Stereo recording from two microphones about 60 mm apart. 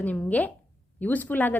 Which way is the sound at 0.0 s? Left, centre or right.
Left.